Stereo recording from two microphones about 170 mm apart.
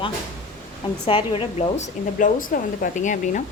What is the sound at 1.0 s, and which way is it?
A woman's voice, 30° left (ahead or behind).